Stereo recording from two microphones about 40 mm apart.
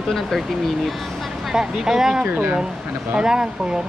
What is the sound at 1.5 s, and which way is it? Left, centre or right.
Speech, centre.